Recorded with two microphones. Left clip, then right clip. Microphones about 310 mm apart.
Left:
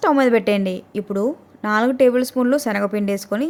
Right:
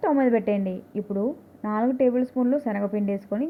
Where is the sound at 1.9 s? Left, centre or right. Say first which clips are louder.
Left 6 dB; left.